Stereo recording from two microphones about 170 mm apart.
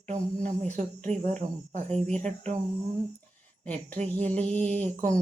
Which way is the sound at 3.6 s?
10° left (ahead or behind).